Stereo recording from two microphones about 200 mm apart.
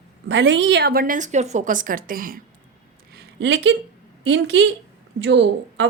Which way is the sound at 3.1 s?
60° right (ahead or behind).